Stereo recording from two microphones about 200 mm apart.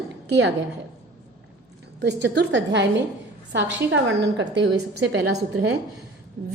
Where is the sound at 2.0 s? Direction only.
60° right (ahead or behind).